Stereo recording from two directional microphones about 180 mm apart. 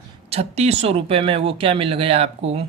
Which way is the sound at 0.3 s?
35° right (ahead or behind).